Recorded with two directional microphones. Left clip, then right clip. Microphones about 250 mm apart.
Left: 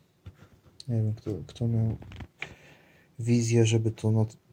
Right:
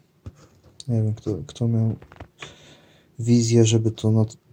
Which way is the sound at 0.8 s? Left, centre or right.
Centre.